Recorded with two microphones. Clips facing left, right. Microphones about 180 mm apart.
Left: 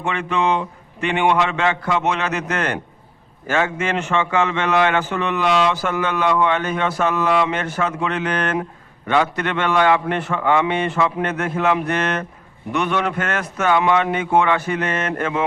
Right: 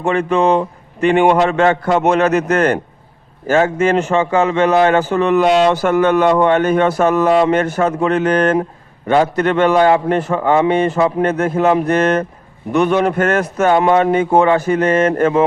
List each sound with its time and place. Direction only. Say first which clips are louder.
0.0 s a man's voice: right 7 dB; 40° right (ahead or behind)